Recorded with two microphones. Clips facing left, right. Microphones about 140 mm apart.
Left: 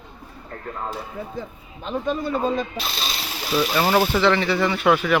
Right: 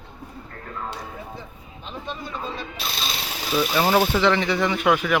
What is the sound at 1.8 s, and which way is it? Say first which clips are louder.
Speech: left 9 dB; 45° left (ahead or behind).